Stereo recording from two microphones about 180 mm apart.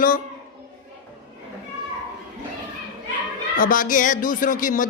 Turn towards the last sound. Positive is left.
turn(degrees=50)  # may be behind; listen again after turning